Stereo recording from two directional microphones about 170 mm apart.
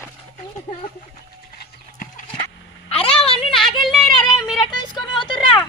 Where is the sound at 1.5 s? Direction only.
55° left (ahead or behind).